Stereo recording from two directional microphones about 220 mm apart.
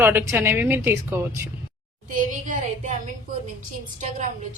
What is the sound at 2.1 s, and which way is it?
Speech, 35° right (ahead or behind).